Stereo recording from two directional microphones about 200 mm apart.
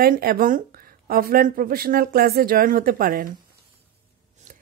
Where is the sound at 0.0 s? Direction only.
50° right (ahead or behind).